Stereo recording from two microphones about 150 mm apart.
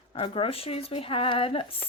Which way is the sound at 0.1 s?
35° left (ahead or behind).